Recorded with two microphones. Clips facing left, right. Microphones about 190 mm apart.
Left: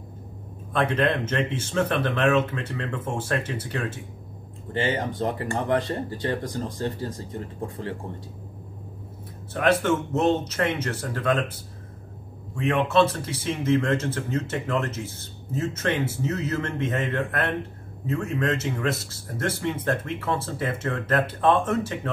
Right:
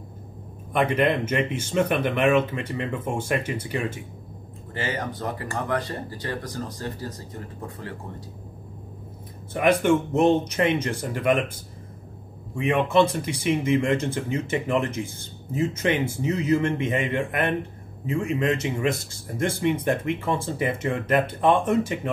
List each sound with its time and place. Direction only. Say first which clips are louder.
0.7 s speech: right 2 dB; 10° right (ahead or behind)
4.7 s speech: left 4 dB; 25° left (ahead or behind)
9.5 s speech: right 2 dB; 10° right (ahead or behind)
12.5 s speech: right 1 dB; 10° right (ahead or behind)